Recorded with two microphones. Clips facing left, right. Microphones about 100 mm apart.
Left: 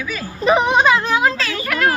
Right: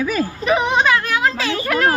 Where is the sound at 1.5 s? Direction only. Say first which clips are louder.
Right 1 dB; 30° right (ahead or behind).